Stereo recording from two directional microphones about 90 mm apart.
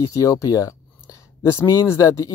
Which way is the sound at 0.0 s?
40° left (ahead or behind).